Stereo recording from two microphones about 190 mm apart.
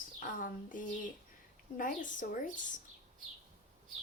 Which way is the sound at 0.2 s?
45° left (ahead or behind).